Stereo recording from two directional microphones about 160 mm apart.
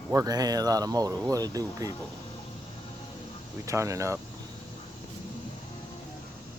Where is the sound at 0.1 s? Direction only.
20° right (ahead or behind).